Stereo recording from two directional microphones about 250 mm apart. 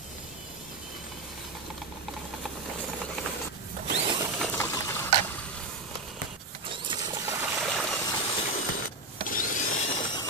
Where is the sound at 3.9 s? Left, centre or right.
Centre.